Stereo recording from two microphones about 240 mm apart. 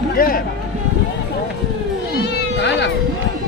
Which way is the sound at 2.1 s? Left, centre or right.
Left.